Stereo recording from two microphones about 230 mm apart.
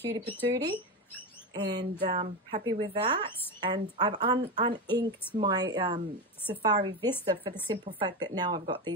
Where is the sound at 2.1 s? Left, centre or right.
Right.